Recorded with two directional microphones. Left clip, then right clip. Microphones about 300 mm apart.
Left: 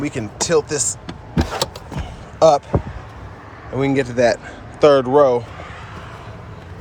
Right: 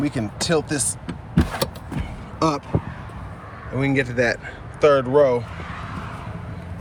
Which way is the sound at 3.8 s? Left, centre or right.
Centre.